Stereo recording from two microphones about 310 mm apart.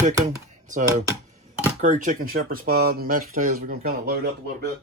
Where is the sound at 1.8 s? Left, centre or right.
Right.